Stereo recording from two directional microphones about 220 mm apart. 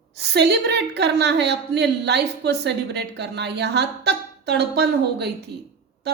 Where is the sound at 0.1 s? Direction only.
50° right (ahead or behind).